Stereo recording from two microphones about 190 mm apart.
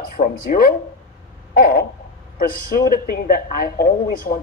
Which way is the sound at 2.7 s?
50° left (ahead or behind).